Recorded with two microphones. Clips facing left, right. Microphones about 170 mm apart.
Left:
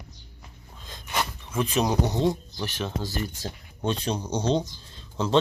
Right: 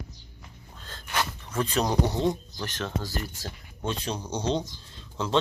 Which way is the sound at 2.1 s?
15° left (ahead or behind).